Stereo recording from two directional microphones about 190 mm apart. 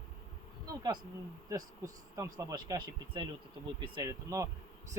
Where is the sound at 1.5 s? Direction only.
15° right (ahead or behind).